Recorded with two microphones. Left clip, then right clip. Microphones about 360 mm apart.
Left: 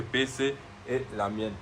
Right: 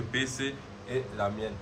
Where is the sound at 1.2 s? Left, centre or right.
Centre.